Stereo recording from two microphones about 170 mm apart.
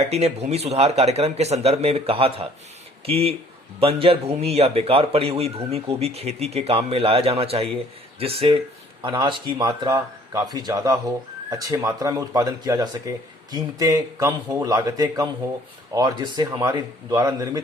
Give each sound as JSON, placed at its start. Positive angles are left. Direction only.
{"t": 0.0, "sound": "a man's voice", "side_deg": -40}